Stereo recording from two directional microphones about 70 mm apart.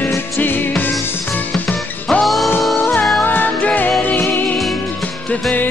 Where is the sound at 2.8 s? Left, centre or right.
Left.